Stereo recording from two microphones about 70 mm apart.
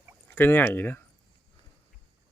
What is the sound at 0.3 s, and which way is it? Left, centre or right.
Speech, left.